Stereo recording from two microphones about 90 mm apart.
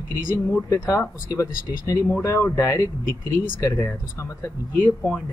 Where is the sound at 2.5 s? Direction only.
35° left (ahead or behind).